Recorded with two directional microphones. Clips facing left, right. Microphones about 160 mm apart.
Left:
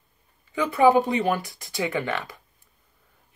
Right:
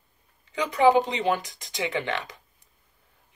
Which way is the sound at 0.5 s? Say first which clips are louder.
Left 1 dB; 20° right (ahead or behind).